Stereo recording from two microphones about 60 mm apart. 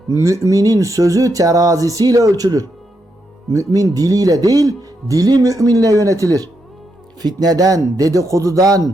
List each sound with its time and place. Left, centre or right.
0.1 s speech: right
3.5 s speech: right
7.3 s speech: right